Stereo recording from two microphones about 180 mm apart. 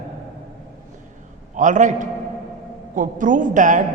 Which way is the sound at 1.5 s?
45° right (ahead or behind).